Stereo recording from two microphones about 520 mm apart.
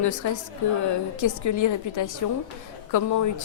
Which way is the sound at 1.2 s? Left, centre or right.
Left.